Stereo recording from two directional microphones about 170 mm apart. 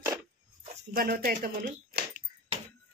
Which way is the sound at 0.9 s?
60° right (ahead or behind).